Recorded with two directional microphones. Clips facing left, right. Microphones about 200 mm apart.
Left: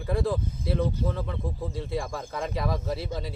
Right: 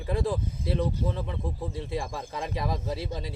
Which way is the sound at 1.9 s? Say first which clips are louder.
Left 1 dB; 15° right (ahead or behind).